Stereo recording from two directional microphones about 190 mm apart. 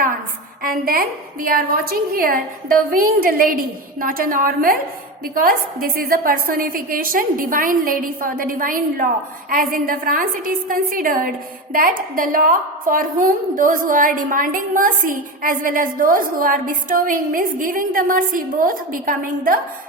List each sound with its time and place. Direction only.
0.6 s a woman's voice: 50° right (ahead or behind)